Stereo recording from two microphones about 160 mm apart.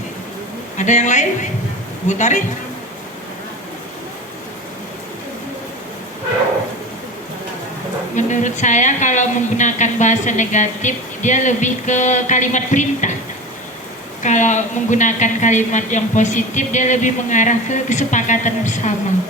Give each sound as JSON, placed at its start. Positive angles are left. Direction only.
{"t": 0.8, "sound": "speech", "side_deg": 50}
{"t": 8.1, "sound": "speech", "side_deg": 50}
{"t": 14.2, "sound": "speech", "side_deg": 50}